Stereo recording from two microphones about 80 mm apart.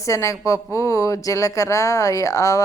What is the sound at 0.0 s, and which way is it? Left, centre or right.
A woman's voice, left.